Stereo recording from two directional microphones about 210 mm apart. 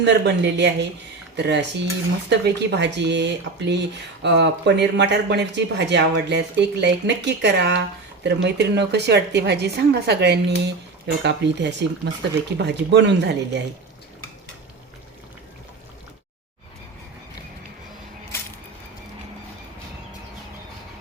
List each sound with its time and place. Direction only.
0.0 s speech: 55° right (ahead or behind)